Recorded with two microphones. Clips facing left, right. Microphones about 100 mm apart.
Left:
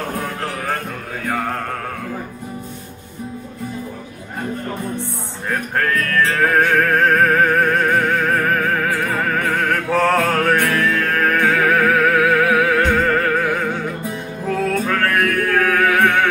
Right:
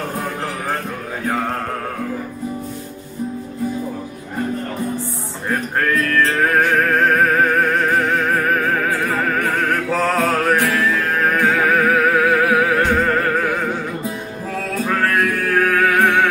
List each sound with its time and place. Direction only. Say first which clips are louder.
6.3 s music: left 3 dB; 10° right (ahead or behind)
9.9 s music: left 3 dB; 15° right (ahead or behind)
14.9 s music: even; 15° right (ahead or behind)